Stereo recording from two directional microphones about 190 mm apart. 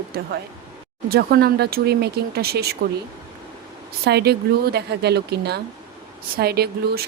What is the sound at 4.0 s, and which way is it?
Speech, 55° right (ahead or behind).